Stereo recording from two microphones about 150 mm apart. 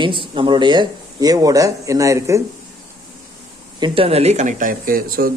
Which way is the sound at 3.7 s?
35° right (ahead or behind).